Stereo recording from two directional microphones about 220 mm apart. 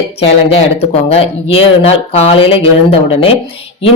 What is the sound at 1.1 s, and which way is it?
Speech, 25° left (ahead or behind).